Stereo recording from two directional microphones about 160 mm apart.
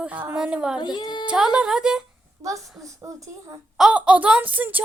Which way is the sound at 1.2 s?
5° right (ahead or behind).